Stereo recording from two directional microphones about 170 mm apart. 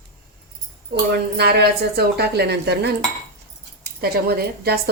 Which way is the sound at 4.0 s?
65° right (ahead or behind).